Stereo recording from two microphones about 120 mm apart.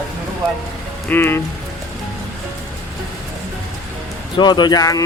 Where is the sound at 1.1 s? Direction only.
20° left (ahead or behind).